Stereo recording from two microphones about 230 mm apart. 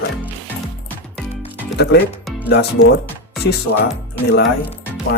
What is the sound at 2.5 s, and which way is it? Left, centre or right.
Speech, left.